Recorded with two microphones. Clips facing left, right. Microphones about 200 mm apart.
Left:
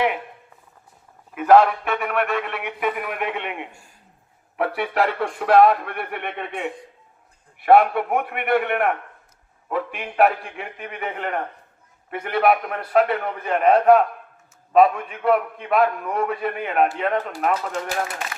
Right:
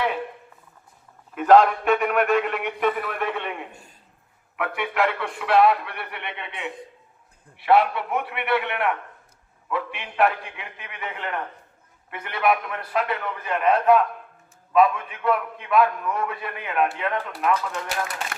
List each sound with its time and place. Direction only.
1.4 s a man's voice: 5° left (ahead or behind)
3.7 s speech: 20° right (ahead or behind)
4.5 s a man's voice: 35° left (ahead or behind)